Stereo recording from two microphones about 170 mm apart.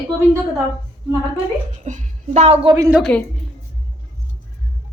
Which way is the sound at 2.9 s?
Centre (ahead or behind).